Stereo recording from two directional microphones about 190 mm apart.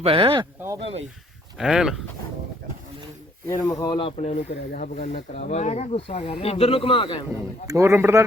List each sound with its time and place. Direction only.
0.0 s speech: 30° right (ahead or behind)
1.5 s speech: 5° right (ahead or behind)
3.4 s speech: 15° left (ahead or behind)
4.2 s speech: 35° left (ahead or behind)
7.7 s a man's voice: 15° right (ahead or behind)